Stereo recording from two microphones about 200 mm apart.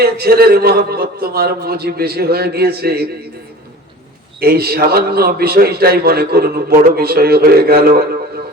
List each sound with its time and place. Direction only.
0.0 s a man's voice: 50° right (ahead or behind)
4.4 s a man's voice: 50° right (ahead or behind)